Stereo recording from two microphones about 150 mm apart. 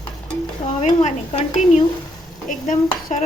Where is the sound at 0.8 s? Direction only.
50° left (ahead or behind).